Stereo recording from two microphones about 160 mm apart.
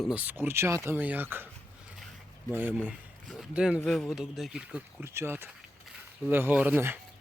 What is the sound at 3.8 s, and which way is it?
Speech, 5° left (ahead or behind).